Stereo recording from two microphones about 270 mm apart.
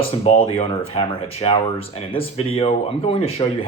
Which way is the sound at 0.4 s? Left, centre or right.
Left.